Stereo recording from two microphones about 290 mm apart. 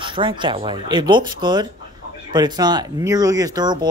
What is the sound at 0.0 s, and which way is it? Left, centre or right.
Speech, centre.